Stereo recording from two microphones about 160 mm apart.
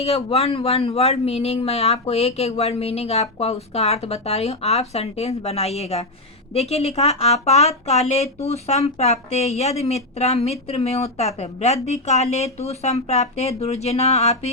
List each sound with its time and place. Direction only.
0.0 s a woman's voice: 40° left (ahead or behind)